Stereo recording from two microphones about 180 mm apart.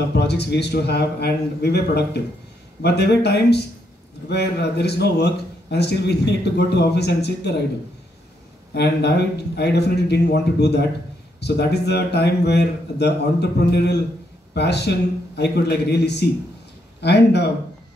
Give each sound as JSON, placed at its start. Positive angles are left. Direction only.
{"t": 0.1, "sound": "a man's voice", "side_deg": 65}
{"t": 8.7, "sound": "a man's voice", "side_deg": 65}